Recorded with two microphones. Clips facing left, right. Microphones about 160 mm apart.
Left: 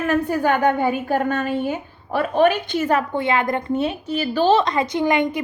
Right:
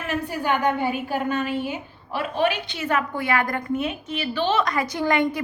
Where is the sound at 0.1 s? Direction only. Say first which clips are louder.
Left 4 dB; 50° left (ahead or behind).